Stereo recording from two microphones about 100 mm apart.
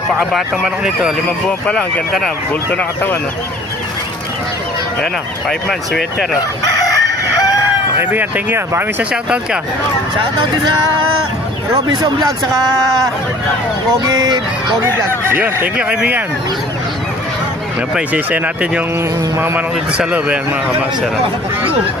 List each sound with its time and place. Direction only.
0.1 s speech: 5° right (ahead or behind)
2.7 s speech: 15° left (ahead or behind)
5.5 s speech: 5° left (ahead or behind)
6.6 s chicken: 35° left (ahead or behind)
8.0 s speech: 15° right (ahead or behind)
9.1 s speech: 10° right (ahead or behind)
14.0 s speech: 45° right (ahead or behind)
15.2 s speech: 20° right (ahead or behind)
17.9 s speech: 15° right (ahead or behind)
19.9 s speech: 10° right (ahead or behind)